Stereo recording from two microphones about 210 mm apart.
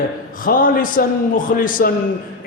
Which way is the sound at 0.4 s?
40° left (ahead or behind).